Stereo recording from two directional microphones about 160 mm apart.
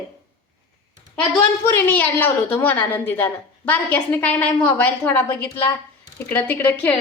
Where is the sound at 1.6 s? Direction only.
10° left (ahead or behind).